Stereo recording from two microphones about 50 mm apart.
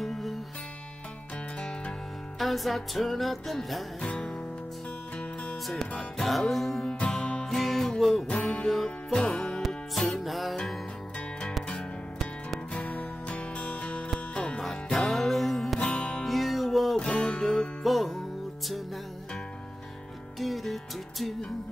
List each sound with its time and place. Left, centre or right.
0.0 s music: centre
1.6 s music: centre
2.3 s music: centre
5.1 s music: centre
5.7 s music: centre
10.5 s music: centre
12.7 s music: left
14.6 s music: centre
15.8 s music: left
16.3 s music: centre
17.0 s music: centre
20.3 s music: centre